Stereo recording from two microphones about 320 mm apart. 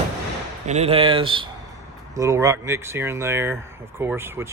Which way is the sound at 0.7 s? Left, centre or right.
Centre.